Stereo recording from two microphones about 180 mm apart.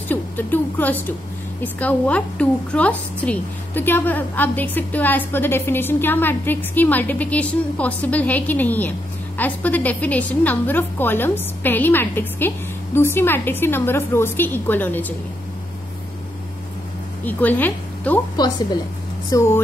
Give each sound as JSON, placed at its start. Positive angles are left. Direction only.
{"t": 0.1, "sound": "a sound", "side_deg": 10}
{"t": 1.6, "sound": "a woman's voice", "side_deg": 10}
{"t": 17.2, "sound": "a woman's voice", "side_deg": 10}
{"t": 18.3, "sound": "a woman's voice", "side_deg": 20}